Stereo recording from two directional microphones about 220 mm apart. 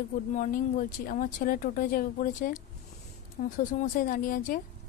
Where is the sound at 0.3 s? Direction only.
35° left (ahead or behind).